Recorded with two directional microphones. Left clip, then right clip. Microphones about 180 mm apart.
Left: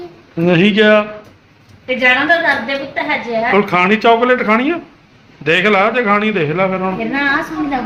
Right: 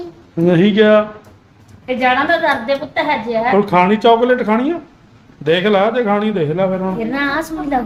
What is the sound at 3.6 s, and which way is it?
A man's voice, 5° right (ahead or behind).